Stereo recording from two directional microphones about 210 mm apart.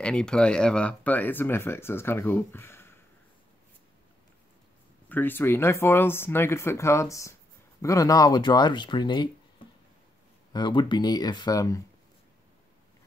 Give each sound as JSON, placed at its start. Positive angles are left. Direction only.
{"t": 0.0, "sound": "speech", "side_deg": 5}
{"t": 5.1, "sound": "speech", "side_deg": 10}
{"t": 10.5, "sound": "speech", "side_deg": 20}